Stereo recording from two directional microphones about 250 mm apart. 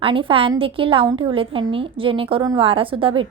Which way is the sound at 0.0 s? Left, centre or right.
Right.